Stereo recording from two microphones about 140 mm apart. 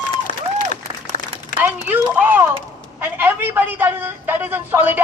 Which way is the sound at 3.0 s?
15° right (ahead or behind).